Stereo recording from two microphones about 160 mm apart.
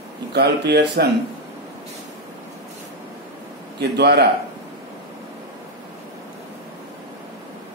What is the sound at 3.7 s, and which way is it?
Speech, 90° right.